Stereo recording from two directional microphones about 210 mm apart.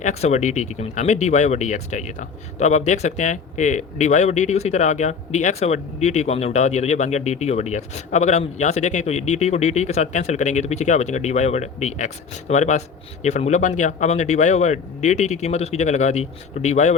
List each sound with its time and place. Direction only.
0.0 s speech: 30° left (ahead or behind)